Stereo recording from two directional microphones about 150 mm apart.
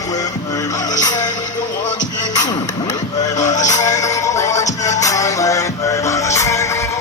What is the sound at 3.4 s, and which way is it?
Music, 55° left (ahead or behind).